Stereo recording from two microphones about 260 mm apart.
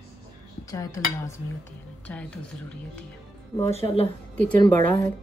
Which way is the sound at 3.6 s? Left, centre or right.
Left.